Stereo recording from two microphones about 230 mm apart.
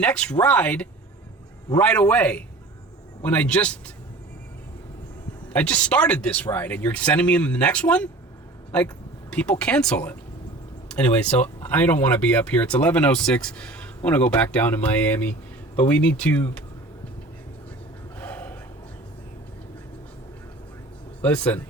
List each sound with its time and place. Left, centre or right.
0.0 s speech: centre
5.5 s speech: centre
9.3 s speech: centre
18.2 s a sound: centre
21.2 s a man's voice: centre